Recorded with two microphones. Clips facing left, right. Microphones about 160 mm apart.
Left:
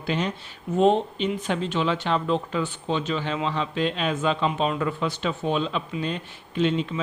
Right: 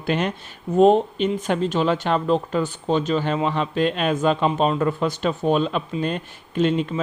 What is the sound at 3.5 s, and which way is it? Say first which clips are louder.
Speech: right 4 dB; 55° right (ahead or behind).